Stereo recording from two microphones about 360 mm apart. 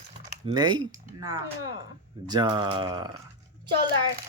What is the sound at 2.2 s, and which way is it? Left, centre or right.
Speech, centre.